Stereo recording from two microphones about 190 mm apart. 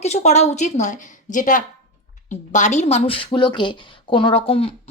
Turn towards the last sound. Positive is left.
turn(degrees=30)  # may be behind; listen again after turning